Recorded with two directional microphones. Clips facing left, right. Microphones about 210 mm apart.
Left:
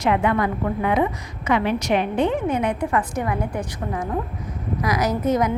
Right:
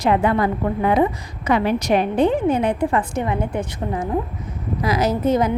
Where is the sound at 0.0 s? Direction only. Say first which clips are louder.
Right 2 dB; 35° right (ahead or behind).